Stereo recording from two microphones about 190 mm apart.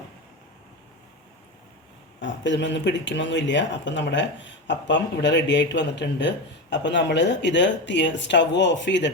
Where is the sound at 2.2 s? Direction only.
70° left (ahead or behind).